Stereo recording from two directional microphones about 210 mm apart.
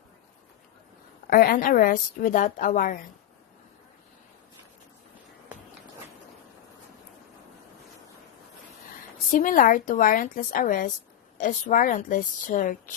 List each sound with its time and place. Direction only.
1.3 s a woman's voice: 45° left (ahead or behind)
9.3 s a woman's voice: 40° left (ahead or behind)